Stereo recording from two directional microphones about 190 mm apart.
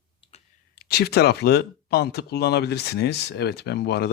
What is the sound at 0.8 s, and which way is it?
Speech, 60° left (ahead or behind).